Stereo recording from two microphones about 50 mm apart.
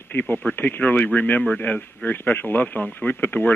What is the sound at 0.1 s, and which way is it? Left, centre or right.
Speech, left.